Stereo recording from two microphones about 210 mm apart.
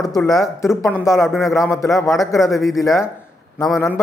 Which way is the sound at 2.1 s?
Centre (ahead or behind).